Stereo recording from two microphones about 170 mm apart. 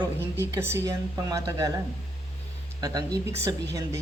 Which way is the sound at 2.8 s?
20° right (ahead or behind).